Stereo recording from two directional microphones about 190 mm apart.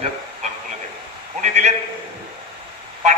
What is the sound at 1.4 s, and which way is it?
Speech, 35° right (ahead or behind).